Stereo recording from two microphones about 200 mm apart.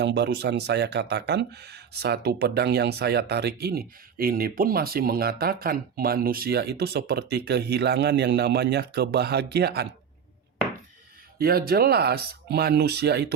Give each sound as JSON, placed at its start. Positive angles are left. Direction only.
{"t": 0.0, "sound": "speech", "side_deg": -60}
{"t": 11.3, "sound": "speech", "side_deg": -50}